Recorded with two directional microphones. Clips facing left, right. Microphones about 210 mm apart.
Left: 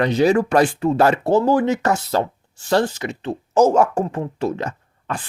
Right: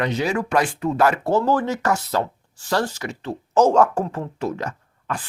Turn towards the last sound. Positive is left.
turn(degrees=25)  # may be behind; listen again after turning